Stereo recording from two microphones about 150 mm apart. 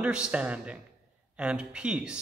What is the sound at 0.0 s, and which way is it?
Speech, 5° right (ahead or behind).